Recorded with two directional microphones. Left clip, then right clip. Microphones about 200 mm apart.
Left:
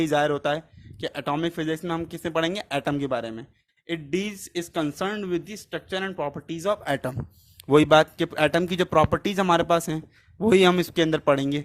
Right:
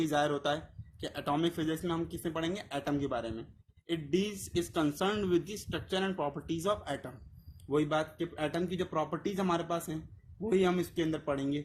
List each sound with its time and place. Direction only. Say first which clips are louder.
0.0 s speech: left 8 dB; 30° left (ahead or behind)